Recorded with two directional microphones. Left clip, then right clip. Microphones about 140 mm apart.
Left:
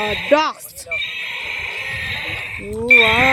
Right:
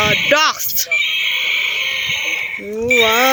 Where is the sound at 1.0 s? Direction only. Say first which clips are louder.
Right 8 dB; 65° left (ahead or behind).